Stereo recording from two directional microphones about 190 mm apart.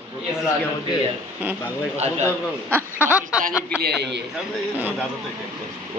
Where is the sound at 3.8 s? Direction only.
65° right (ahead or behind).